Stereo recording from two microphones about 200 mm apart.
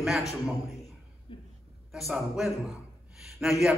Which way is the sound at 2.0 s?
Centre (ahead or behind).